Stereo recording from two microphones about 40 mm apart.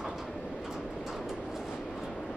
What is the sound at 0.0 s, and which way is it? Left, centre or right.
Train, centre.